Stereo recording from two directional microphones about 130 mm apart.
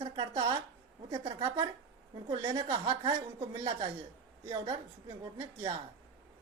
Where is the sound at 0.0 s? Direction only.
45° right (ahead or behind).